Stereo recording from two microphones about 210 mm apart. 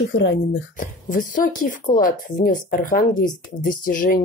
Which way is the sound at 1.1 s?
40° left (ahead or behind).